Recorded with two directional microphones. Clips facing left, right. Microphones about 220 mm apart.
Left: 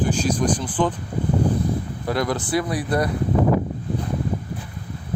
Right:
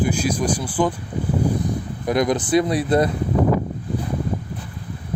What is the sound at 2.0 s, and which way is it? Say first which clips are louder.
Speech: right 5 dB; 20° right (ahead or behind).